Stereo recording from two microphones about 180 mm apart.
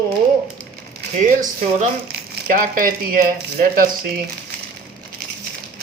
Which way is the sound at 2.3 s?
50° right (ahead or behind).